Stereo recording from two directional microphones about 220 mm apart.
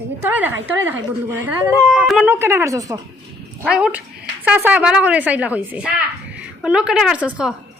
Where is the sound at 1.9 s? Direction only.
Centre (ahead or behind).